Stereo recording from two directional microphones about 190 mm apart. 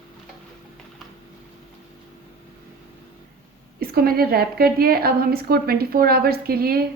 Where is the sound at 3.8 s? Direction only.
55° right (ahead or behind).